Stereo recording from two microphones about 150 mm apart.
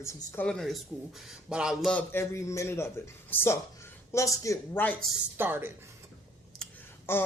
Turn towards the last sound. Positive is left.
turn(degrees=15)  # may be behind; listen again after turning